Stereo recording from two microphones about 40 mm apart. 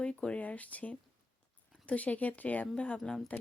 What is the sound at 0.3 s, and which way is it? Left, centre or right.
Speech, left.